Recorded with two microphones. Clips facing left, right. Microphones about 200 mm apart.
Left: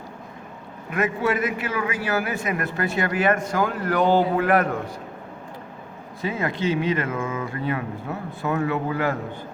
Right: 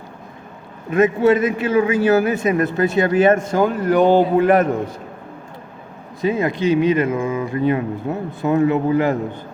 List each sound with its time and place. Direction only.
0.9 s a man's voice: 25° right (ahead or behind)
6.2 s a man's voice: 15° right (ahead or behind)